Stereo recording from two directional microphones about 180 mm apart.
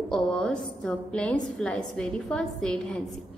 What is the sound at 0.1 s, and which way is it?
A woman's voice, 5° left (ahead or behind).